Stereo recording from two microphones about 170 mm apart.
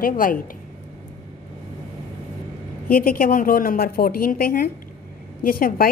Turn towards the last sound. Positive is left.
turn(degrees=60)  # may be behind; listen again after turning